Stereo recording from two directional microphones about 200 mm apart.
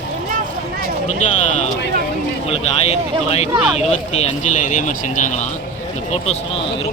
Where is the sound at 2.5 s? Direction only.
30° left (ahead or behind).